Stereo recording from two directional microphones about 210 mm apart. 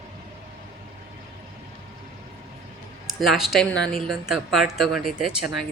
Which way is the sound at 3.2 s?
Centre (ahead or behind).